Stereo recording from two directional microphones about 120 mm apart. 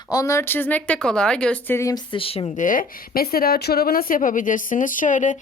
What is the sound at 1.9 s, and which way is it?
Speech, 45° left (ahead or behind).